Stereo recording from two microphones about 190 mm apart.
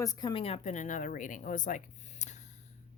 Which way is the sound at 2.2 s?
40° left (ahead or behind).